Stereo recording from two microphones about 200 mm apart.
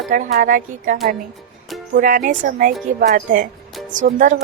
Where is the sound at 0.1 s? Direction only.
45° right (ahead or behind).